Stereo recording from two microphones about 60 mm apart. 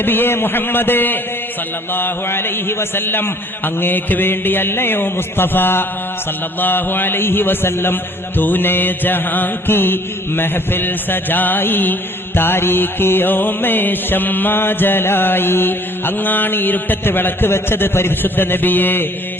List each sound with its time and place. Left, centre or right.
0.0 s mantra: left